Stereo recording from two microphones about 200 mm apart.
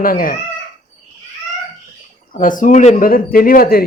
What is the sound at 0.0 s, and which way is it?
Speech, 45° left (ahead or behind).